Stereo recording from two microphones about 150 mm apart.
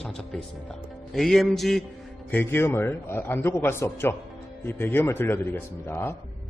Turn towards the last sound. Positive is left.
turn(degrees=15)  # may be behind; listen again after turning